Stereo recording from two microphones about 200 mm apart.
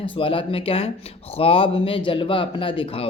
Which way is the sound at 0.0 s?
25° left (ahead or behind).